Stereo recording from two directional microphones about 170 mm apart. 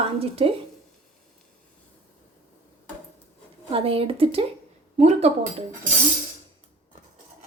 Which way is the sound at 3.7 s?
35° right (ahead or behind).